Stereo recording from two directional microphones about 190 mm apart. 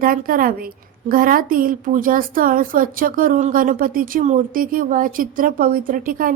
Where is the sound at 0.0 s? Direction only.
50° right (ahead or behind).